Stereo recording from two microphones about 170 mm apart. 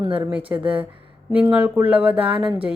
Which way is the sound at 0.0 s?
25° right (ahead or behind).